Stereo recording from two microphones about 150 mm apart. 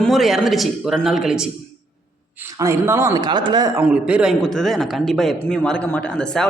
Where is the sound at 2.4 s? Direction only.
20° right (ahead or behind).